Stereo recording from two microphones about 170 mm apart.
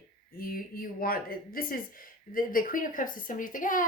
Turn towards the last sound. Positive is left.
turn(degrees=50)  # may be behind; listen again after turning